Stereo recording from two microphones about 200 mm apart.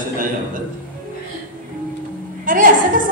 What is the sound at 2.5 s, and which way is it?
Speech, 45° right (ahead or behind).